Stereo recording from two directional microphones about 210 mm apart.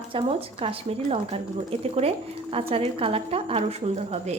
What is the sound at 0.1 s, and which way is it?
A woman's voice, 25° right (ahead or behind).